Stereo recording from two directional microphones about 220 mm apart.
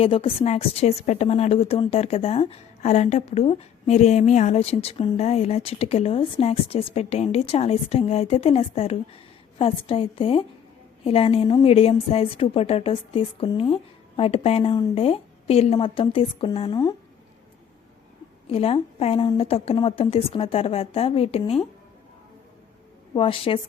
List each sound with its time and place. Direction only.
0.0 s a woman's voice: 25° left (ahead or behind)
18.4 s a woman's voice: 25° left (ahead or behind)
23.1 s a woman's voice: 25° left (ahead or behind)